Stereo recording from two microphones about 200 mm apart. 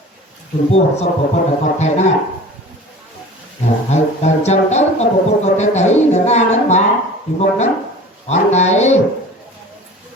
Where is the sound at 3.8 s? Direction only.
35° left (ahead or behind).